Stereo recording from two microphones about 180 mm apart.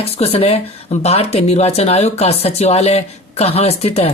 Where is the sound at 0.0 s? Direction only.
35° left (ahead or behind).